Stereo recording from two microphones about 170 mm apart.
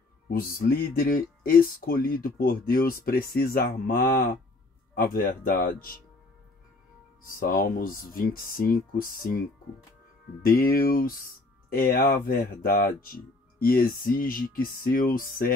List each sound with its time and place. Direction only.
0.3 s speech: 60° left (ahead or behind)
7.3 s speech: 60° left (ahead or behind)
10.4 s speech: 60° left (ahead or behind)